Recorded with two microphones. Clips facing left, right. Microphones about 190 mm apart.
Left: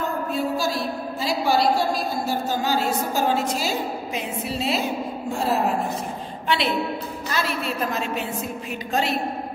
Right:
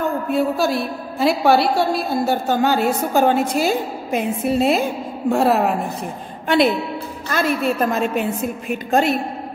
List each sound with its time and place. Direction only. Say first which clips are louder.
0.3 s a woman's voice: right 7 dB; 60° right (ahead or behind)
6.4 s a woman's voice: right 7 dB; 45° right (ahead or behind)